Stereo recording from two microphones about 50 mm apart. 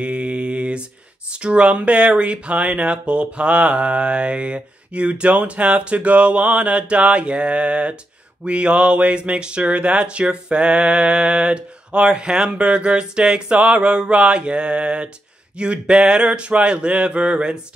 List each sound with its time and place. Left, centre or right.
0.0 s mantra: right
1.3 s speech: right